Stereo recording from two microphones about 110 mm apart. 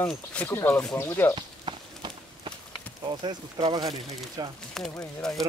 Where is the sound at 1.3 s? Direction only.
50° right (ahead or behind).